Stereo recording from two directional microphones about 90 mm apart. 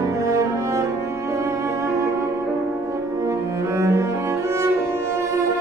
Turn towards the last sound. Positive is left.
turn(degrees=-35)  # may be behind; listen again after turning